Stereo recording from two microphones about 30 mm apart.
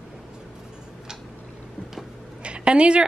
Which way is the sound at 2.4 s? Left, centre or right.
Right.